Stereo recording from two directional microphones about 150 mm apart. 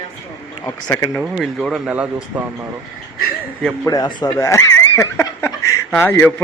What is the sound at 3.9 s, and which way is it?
Speech, 25° left (ahead or behind).